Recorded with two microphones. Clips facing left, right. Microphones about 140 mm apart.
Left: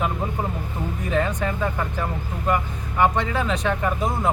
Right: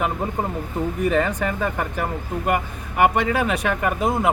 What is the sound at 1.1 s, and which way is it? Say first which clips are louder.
Speech: right 2 dB; 65° right (ahead or behind).